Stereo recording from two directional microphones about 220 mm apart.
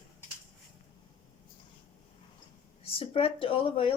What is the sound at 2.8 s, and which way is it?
Speech, 25° left (ahead or behind).